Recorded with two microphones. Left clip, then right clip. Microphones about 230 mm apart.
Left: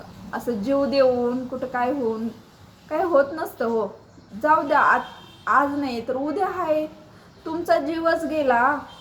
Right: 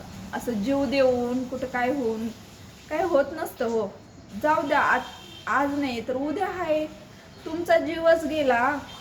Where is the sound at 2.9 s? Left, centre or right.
Centre.